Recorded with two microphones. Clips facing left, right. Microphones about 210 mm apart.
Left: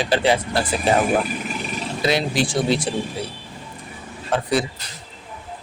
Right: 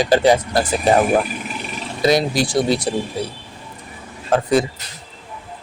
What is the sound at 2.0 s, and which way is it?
Speech, 40° right (ahead or behind).